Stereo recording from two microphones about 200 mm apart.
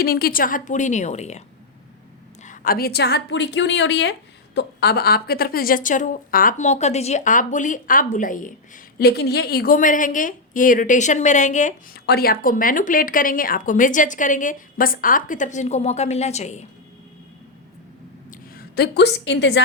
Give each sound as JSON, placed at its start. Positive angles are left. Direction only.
{"t": 0.0, "sound": "a woman's voice", "side_deg": 50}
{"t": 2.4, "sound": "a woman's voice", "side_deg": 45}
{"t": 12.0, "sound": "a woman's voice", "side_deg": 50}
{"t": 18.3, "sound": "a woman's voice", "side_deg": 50}